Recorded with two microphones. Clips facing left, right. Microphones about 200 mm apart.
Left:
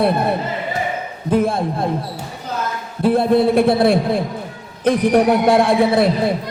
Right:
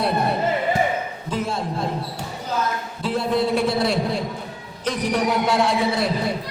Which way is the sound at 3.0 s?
55° left (ahead or behind).